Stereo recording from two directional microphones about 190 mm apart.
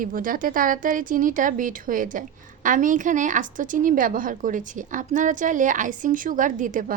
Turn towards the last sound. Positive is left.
turn(degrees=-45)  # may be behind; listen again after turning